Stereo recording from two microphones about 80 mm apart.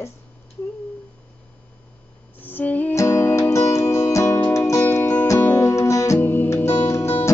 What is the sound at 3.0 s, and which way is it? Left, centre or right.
Music, left.